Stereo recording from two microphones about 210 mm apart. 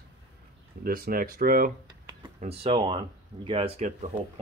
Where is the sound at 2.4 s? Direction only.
30° right (ahead or behind).